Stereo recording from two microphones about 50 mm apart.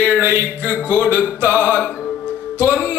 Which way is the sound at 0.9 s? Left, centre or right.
Right.